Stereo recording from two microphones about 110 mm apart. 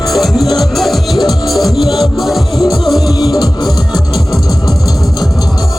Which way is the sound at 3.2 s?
40° left (ahead or behind).